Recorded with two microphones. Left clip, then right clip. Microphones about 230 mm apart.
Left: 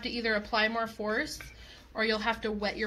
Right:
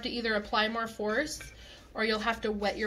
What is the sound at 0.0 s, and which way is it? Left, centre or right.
Speech, left.